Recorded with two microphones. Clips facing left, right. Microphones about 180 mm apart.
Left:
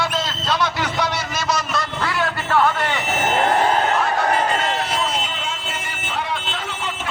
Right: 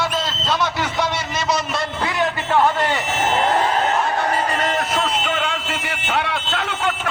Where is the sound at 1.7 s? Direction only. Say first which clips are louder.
Right 1 dB; 20° right (ahead or behind).